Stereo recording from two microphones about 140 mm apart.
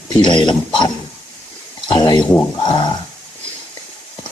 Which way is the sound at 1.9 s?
30° left (ahead or behind).